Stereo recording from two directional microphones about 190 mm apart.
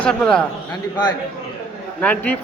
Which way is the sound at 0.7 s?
20° left (ahead or behind).